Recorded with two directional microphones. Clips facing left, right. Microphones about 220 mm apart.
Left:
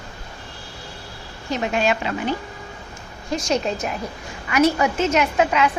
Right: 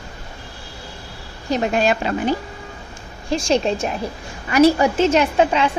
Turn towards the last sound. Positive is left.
turn(degrees=-30)  # may be behind; listen again after turning